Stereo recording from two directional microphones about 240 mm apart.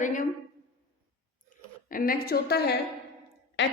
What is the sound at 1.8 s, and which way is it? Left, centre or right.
A woman's voice, left.